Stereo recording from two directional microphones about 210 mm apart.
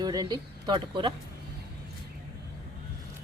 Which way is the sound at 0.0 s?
20° right (ahead or behind).